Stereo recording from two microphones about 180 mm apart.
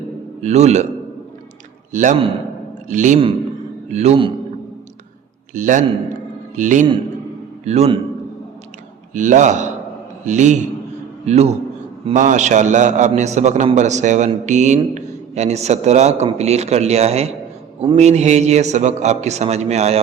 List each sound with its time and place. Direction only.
0.4 s a man's voice: 40° right (ahead or behind)
1.9 s a man's voice: 45° right (ahead or behind)
5.5 s a man's voice: 45° right (ahead or behind)
9.1 s a man's voice: 45° right (ahead or behind)